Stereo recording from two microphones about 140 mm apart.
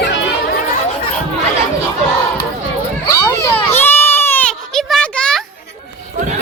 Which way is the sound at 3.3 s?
20° left (ahead or behind).